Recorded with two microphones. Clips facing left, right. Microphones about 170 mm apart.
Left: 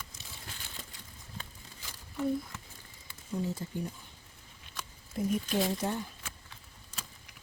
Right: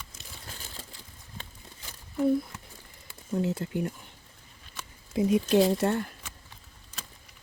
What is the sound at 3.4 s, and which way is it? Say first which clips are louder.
Speech: right 6 dB; 75° right (ahead or behind).